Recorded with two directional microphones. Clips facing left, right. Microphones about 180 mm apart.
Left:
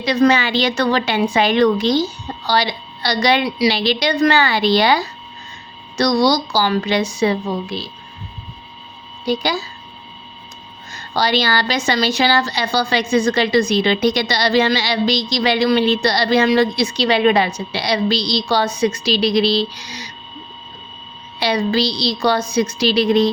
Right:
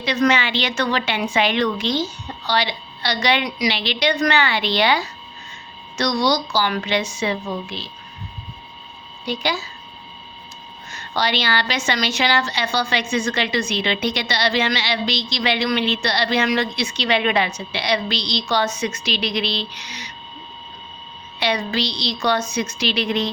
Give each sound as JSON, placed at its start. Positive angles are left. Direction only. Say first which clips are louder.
{"t": 0.0, "sound": "a woman's voice", "louder": "left 4 dB", "side_deg": 35}
{"t": 9.2, "sound": "a woman's voice", "louder": "left 5 dB", "side_deg": 40}
{"t": 10.9, "sound": "a woman's voice", "louder": "left 4 dB", "side_deg": 35}
{"t": 21.3, "sound": "a woman's voice", "louder": "left 5 dB", "side_deg": 35}